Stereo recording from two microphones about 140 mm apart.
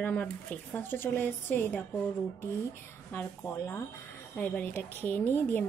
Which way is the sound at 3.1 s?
15° left (ahead or behind).